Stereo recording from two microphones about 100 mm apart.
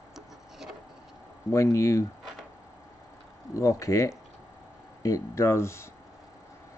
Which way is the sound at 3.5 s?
35° left (ahead or behind).